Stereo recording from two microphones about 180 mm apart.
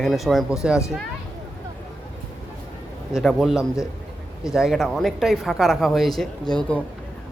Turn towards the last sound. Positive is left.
turn(degrees=5)  # may be behind; listen again after turning